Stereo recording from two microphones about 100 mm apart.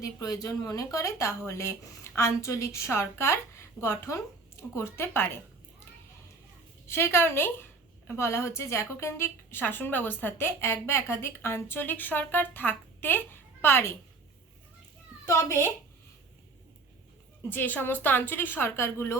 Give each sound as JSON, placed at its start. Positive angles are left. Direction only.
{"t": 0.0, "sound": "a woman's voice", "side_deg": 35}
{"t": 6.8, "sound": "a woman's voice", "side_deg": 25}
{"t": 15.3, "sound": "a woman's voice", "side_deg": 30}
{"t": 17.5, "sound": "a woman's voice", "side_deg": 20}